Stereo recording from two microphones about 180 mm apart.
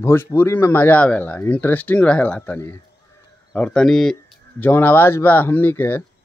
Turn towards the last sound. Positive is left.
turn(degrees=10)  # may be behind; listen again after turning